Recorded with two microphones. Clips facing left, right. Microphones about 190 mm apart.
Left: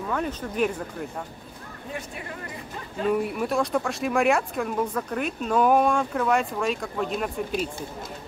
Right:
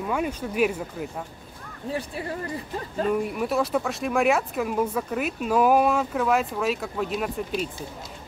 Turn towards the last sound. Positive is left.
turn(degrees=0)  # may be behind; listen again after turning